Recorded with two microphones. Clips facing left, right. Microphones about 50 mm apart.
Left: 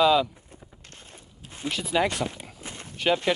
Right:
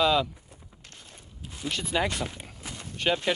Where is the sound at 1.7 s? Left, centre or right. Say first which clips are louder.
Left 3 dB; centre.